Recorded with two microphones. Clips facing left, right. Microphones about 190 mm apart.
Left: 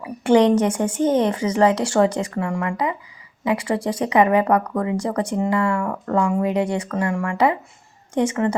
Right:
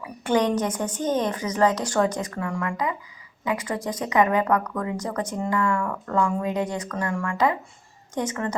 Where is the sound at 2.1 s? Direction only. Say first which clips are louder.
Left 5 dB; 10° left (ahead or behind).